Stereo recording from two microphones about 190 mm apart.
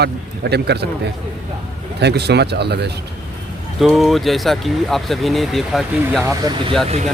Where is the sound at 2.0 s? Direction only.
60° right (ahead or behind).